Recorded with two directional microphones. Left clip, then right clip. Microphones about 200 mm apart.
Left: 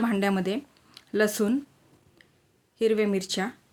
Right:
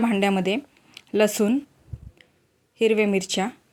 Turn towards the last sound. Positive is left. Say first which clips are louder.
# right 4 dB
turn(degrees=-20)  # may be behind; listen again after turning